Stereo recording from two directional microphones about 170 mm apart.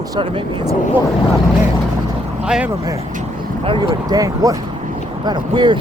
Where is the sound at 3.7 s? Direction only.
25° right (ahead or behind).